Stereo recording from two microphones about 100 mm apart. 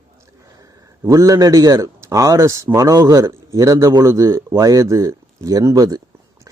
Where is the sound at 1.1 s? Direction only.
35° right (ahead or behind).